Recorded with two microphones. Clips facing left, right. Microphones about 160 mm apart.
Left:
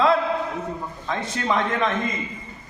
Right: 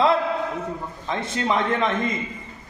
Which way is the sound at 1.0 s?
20° right (ahead or behind).